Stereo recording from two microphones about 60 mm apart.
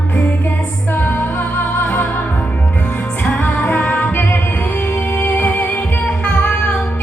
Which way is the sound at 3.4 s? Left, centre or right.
Left.